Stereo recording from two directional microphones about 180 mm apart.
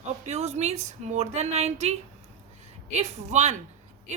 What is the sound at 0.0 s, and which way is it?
A woman's voice, 40° right (ahead or behind).